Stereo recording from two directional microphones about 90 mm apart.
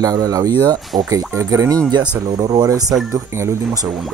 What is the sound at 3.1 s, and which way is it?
Speech, 30° right (ahead or behind).